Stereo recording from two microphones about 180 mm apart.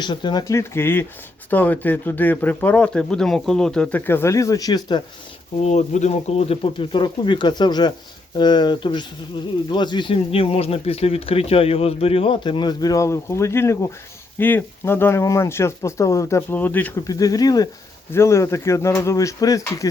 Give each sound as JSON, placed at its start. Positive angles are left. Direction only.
{"t": 0.0, "sound": "speech", "side_deg": 25}
{"t": 5.5, "sound": "speech", "side_deg": 40}